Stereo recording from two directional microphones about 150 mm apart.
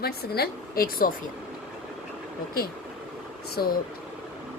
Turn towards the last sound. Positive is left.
turn(degrees=90)